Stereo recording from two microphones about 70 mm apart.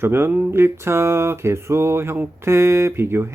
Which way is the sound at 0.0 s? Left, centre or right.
Right.